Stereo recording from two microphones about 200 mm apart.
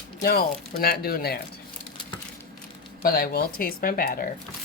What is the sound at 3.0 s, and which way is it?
Speech, 50° left (ahead or behind).